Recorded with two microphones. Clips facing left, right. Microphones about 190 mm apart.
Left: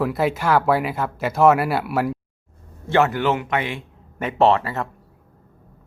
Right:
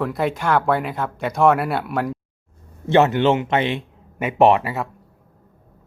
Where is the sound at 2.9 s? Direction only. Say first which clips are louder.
Right 3 dB; 20° right (ahead or behind).